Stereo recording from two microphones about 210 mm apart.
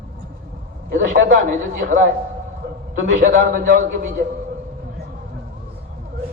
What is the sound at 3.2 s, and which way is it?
Speech, 40° right (ahead or behind).